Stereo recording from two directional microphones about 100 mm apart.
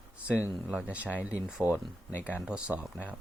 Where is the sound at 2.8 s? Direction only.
15° left (ahead or behind).